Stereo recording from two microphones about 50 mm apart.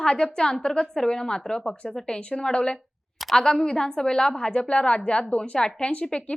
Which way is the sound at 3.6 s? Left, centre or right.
Centre.